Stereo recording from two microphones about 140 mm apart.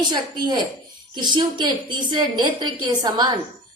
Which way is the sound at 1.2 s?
35° right (ahead or behind).